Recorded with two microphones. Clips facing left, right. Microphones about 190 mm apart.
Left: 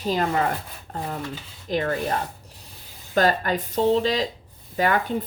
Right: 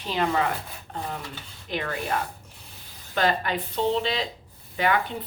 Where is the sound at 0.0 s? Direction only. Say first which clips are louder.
Left 2 dB; 40° left (ahead or behind).